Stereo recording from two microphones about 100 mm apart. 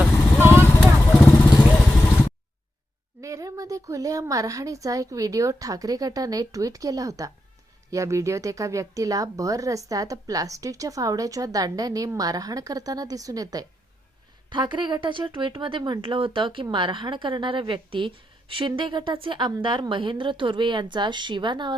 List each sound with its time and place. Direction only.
0.3 s vehicle: 20° right (ahead or behind)
0.8 s vehicle: 10° left (ahead or behind)
3.2 s speech: 35° right (ahead or behind)
14.5 s a woman's voice: 50° right (ahead or behind)